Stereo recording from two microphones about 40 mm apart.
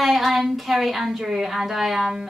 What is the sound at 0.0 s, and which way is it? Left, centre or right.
A woman's voice, centre.